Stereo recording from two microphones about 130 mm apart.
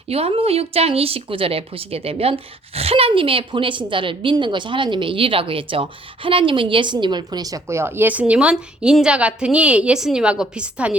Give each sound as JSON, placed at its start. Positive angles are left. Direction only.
{"t": 0.1, "sound": "speech", "side_deg": -50}